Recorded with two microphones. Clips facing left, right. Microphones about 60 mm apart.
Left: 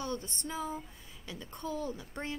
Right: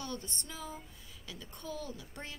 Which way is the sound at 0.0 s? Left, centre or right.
Left.